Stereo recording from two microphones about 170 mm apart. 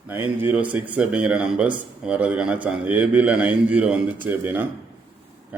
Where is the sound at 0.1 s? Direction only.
10° right (ahead or behind).